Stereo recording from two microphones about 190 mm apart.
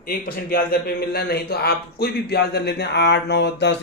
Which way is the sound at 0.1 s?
50° left (ahead or behind).